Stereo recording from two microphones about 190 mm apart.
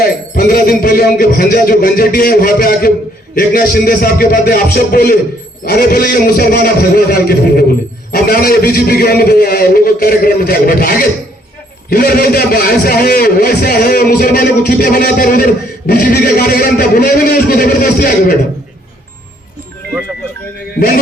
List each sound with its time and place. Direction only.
0.0 s a man's voice: 50° left (ahead or behind)
20.7 s a man's voice: 50° left (ahead or behind)